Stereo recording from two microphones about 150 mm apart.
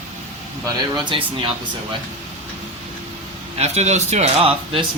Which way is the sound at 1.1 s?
35° right (ahead or behind).